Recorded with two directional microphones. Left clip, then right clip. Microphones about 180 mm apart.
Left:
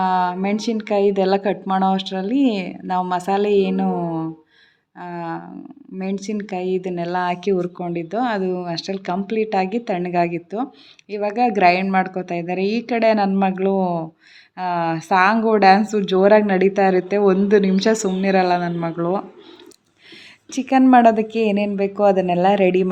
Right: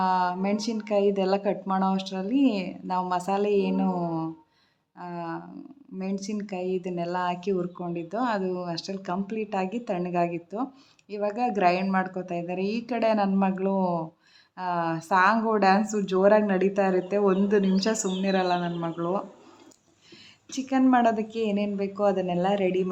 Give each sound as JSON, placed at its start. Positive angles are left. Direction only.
{"t": 0.0, "sound": "speech", "side_deg": 15}
{"t": 20.5, "sound": "a woman's voice", "side_deg": 35}